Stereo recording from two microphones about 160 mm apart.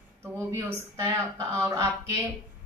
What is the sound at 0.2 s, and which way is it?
A woman's voice, 15° right (ahead or behind).